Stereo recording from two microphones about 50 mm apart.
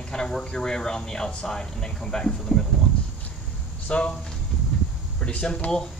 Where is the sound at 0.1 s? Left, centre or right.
Centre.